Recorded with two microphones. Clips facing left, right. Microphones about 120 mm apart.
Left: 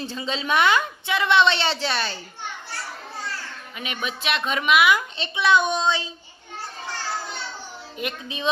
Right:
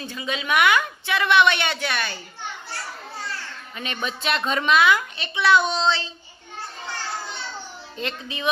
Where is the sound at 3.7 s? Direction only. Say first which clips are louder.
Right 1 dB; 5° left (ahead or behind).